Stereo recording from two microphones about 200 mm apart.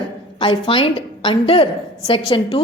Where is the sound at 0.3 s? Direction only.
25° left (ahead or behind).